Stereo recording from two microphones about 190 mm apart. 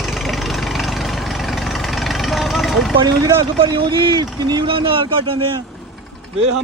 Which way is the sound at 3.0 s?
20° right (ahead or behind).